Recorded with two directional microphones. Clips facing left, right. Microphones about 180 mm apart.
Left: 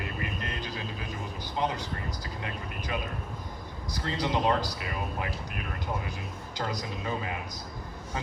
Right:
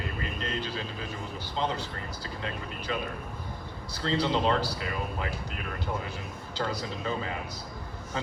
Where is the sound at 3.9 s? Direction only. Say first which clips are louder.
Right 2 dB; 15° left (ahead or behind).